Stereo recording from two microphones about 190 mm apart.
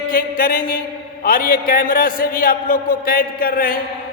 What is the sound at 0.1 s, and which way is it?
A man's voice, 50° left (ahead or behind).